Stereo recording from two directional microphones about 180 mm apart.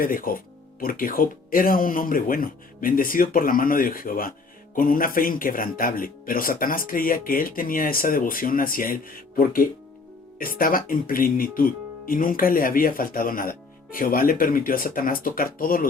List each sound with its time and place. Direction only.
0.0 s speech: 50° left (ahead or behind)